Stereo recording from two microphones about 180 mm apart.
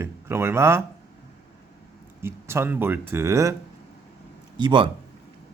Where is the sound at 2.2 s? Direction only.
15° right (ahead or behind).